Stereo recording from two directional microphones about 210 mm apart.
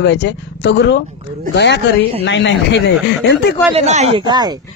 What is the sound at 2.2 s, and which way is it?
Speech, 55° left (ahead or behind).